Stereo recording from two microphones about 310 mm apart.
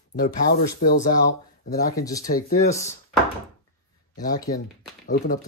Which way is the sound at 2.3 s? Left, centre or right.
Left.